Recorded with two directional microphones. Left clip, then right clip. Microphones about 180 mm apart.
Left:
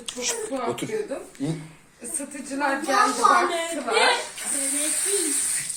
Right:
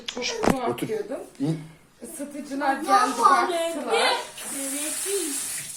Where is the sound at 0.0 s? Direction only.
20° right (ahead or behind).